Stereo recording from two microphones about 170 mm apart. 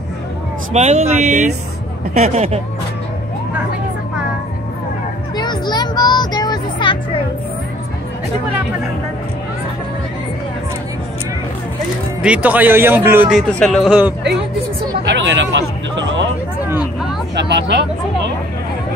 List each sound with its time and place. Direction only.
0.7 s speech: 40° right (ahead or behind)
5.3 s music: 25° left (ahead or behind)
12.2 s a man's voice: 10° right (ahead or behind)
13.3 s speech: 5° left (ahead or behind)
15.0 s hubbub: 90° right
17.5 s speech: 90° right